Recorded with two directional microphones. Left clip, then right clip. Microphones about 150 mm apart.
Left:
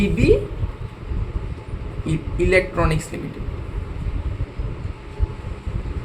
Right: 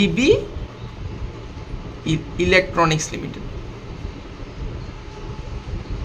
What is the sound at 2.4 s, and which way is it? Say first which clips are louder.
Speech: right 2 dB; 40° right (ahead or behind).